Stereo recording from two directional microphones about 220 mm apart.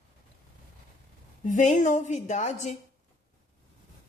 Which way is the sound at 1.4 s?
35° left (ahead or behind).